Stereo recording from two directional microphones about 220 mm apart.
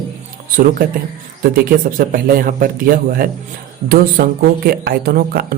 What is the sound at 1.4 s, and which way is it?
Speech, 40° right (ahead or behind).